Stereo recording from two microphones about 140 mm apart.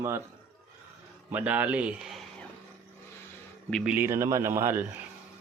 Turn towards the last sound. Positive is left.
turn(degrees=-15)  # may be behind; listen again after turning